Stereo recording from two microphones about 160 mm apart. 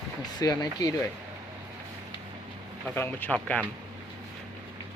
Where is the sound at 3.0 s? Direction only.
10° left (ahead or behind).